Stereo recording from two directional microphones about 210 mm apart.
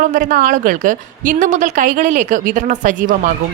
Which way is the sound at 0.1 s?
40° right (ahead or behind).